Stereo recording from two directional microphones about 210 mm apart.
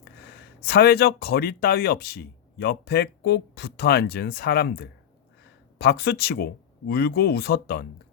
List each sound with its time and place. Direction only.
0.6 s speech: 50° left (ahead or behind)